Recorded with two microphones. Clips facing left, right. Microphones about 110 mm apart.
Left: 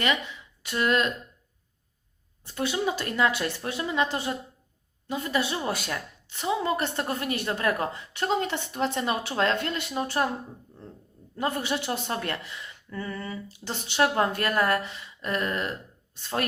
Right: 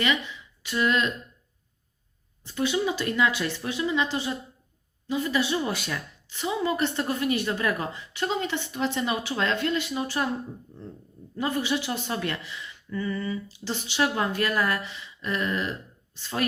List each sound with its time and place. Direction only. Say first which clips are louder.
0.7 s speech: even; 45° left (ahead or behind)
2.6 s speech: right 2 dB; 45° left (ahead or behind)
11.3 s speech: right 1 dB; 45° left (ahead or behind)